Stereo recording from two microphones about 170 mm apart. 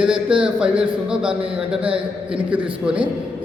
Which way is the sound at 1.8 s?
35° right (ahead or behind).